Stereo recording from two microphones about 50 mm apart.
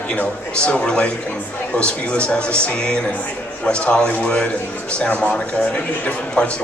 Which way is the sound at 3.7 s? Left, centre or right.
Left.